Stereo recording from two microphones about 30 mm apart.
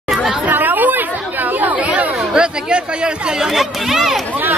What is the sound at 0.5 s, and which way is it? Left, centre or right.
Chatter, right.